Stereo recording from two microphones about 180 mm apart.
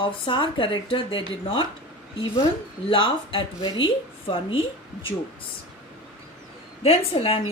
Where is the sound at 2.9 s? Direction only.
25° left (ahead or behind).